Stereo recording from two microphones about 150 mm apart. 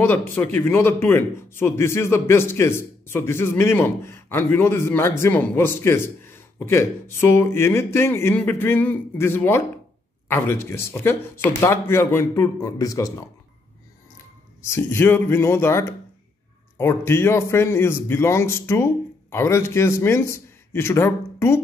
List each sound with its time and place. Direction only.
0.0 s a man's voice: 15° left (ahead or behind)
14.7 s a man's voice: 15° left (ahead or behind)